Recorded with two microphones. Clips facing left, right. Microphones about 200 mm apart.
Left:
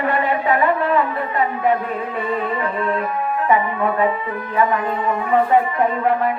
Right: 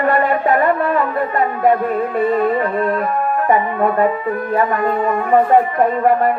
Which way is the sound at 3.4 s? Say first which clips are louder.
Right 2 dB; 45° right (ahead or behind).